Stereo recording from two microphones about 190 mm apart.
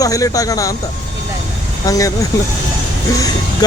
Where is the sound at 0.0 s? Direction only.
20° left (ahead or behind).